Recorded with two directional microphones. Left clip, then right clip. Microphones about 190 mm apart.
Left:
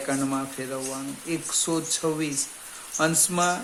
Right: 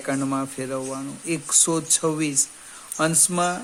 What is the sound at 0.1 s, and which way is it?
Speech, 40° right (ahead or behind).